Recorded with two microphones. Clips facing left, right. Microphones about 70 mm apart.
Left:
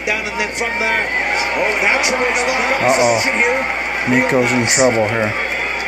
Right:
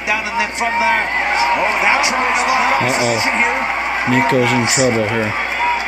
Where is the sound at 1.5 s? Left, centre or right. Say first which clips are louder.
Right 1 dB; left.